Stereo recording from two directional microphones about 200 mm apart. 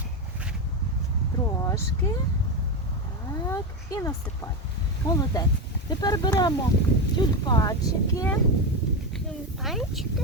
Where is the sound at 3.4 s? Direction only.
20° left (ahead or behind).